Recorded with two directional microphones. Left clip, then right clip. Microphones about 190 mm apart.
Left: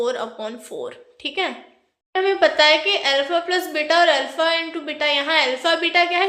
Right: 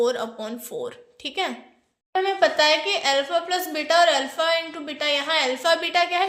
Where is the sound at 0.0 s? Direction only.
25° right (ahead or behind).